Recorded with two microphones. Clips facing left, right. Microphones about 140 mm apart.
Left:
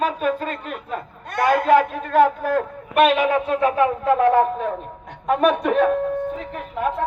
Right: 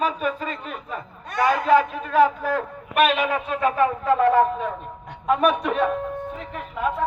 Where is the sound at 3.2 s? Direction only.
60° left (ahead or behind).